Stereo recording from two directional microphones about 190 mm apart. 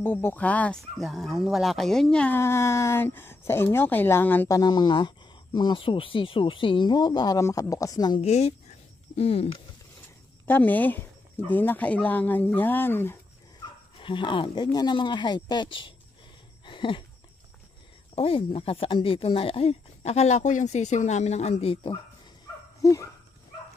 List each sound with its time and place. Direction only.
0.0 s speech: 10° left (ahead or behind)
8.2 s speech: 35° left (ahead or behind)
10.4 s speech: 10° left (ahead or behind)
13.9 s speech: 25° left (ahead or behind)
16.6 s a sound: 25° left (ahead or behind)
18.1 s speech: 30° left (ahead or behind)
22.8 s dog: 15° left (ahead or behind)